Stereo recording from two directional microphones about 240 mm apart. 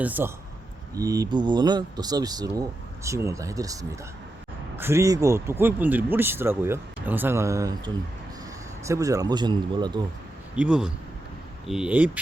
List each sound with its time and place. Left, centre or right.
0.0 s speech: centre
8.9 s speech: centre
10.5 s speech: centre